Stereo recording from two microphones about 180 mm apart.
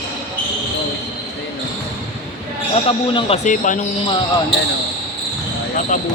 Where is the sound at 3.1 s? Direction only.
35° left (ahead or behind).